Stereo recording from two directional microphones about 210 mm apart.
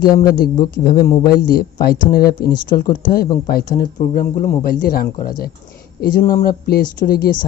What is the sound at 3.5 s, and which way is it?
A woman's voice, 45° left (ahead or behind).